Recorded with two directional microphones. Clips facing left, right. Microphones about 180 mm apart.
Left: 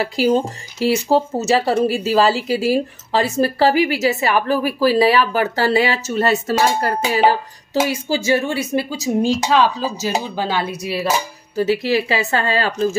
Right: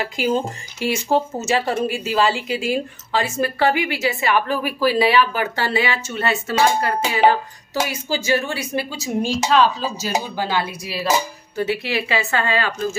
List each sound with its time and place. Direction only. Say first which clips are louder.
0.0 s a woman's voice: left 4 dB; 35° left (ahead or behind)
7.0 s speech: left 1 dB; 5° left (ahead or behind)
7.9 s speech: left 3 dB; 25° left (ahead or behind)
11.5 s a woman's voice: left 5 dB; 40° left (ahead or behind)